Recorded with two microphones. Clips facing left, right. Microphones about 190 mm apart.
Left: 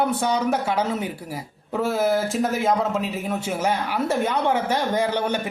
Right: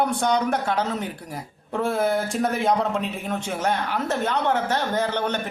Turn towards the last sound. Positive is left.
turn(degrees=10)  # may be behind; listen again after turning